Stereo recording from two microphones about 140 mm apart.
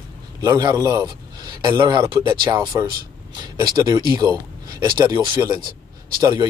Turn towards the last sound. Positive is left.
turn(degrees=-30)  # may be behind; listen again after turning